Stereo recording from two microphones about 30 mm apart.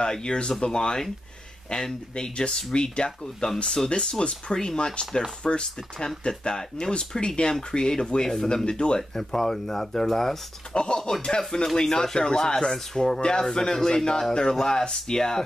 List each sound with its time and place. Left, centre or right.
0.0 s speech: left
5.4 s speech: left
9.1 s speech: centre
10.7 s speech: left